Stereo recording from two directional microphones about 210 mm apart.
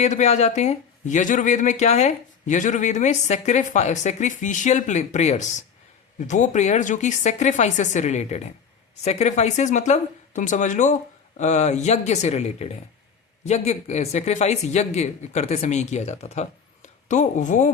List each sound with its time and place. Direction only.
0.0 s speech: 35° left (ahead or behind)